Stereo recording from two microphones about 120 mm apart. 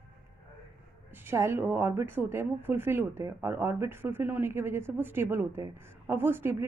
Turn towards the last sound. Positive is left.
turn(degrees=-20)  # may be behind; listen again after turning